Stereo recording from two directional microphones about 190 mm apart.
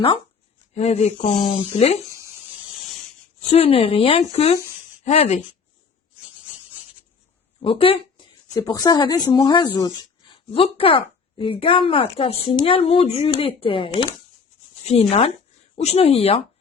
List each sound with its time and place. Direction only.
0.7 s speech: 35° left (ahead or behind)
3.5 s speech: 30° left (ahead or behind)
7.6 s a woman's voice: 30° left (ahead or behind)
15.7 s speech: 35° left (ahead or behind)